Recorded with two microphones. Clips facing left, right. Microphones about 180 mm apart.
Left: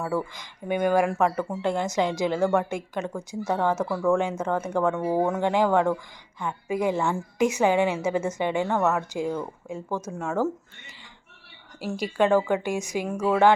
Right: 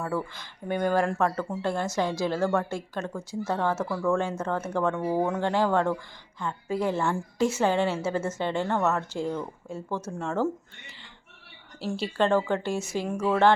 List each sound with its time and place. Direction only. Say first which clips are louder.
0.0 s a woman's voice: left 2 dB; 10° left (ahead or behind)
11.8 s a woman's voice: left 2 dB; 10° left (ahead or behind)